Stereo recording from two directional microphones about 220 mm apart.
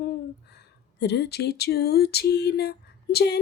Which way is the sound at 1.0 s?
50° left (ahead or behind).